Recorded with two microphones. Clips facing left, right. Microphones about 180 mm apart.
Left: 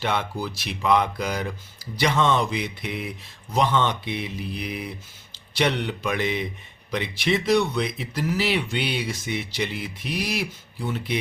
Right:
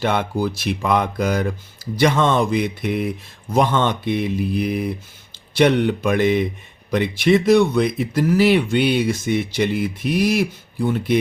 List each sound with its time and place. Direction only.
0.0 s speech: 50° right (ahead or behind)